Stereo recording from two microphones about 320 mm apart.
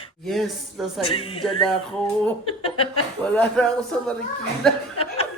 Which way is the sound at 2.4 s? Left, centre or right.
Centre.